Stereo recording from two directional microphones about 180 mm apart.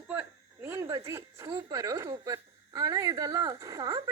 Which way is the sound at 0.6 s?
15° right (ahead or behind).